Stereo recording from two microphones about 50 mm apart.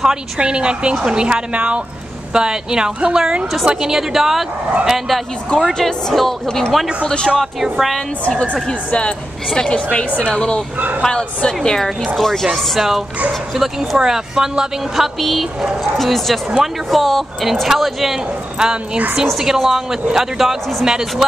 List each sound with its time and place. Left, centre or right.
0.0 s speech: centre
5.7 s speech: centre
7.2 s speech: centre
8.6 s a woman's voice: centre
12.5 s speech: centre
15.1 s speech: centre
18.6 s speech: centre